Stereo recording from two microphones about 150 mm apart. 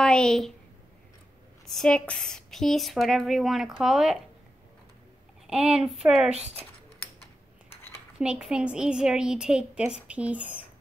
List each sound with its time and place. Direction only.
0.0 s a woman's voice: 5° left (ahead or behind)
1.7 s speech: 5° left (ahead or behind)
5.5 s speech: 5° right (ahead or behind)
6.3 s speech: 45° right (ahead or behind)
8.2 s speech: 5° right (ahead or behind)